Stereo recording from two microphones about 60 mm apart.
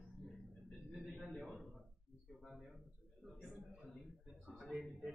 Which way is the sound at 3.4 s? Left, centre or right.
Centre.